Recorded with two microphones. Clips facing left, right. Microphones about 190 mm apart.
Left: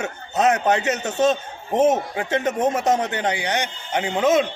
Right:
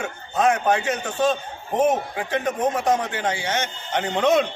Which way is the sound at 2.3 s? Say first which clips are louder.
Left 2 dB; 25° left (ahead or behind).